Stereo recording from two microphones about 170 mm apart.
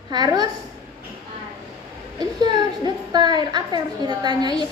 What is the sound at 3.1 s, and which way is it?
A woman's voice, 25° right (ahead or behind).